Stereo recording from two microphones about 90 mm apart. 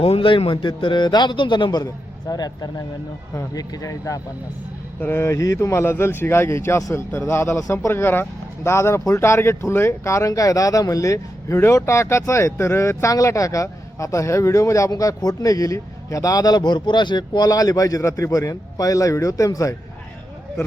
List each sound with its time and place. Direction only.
0.0 s a man's voice: 85° left
0.5 s a man's voice: 60° left (ahead or behind); by 4.2 s 40° left (ahead or behind)
4.9 s speech: 25° left (ahead or behind); by 19.7 s 40° left (ahead or behind)